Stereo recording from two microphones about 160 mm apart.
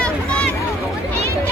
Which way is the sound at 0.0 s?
5° left (ahead or behind).